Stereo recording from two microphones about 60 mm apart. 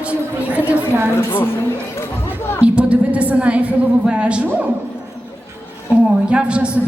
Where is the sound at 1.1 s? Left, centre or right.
Left.